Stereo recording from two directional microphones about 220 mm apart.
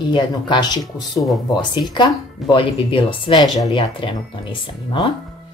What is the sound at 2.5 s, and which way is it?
Speech, 25° left (ahead or behind).